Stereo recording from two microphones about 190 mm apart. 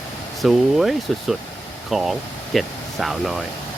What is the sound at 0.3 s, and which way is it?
Speech, centre (ahead or behind).